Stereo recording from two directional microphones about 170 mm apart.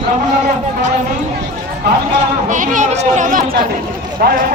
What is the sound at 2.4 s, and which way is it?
A man's voice, 50° right (ahead or behind).